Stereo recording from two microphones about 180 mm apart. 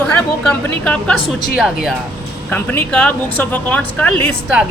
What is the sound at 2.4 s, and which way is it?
Speech, 10° left (ahead or behind).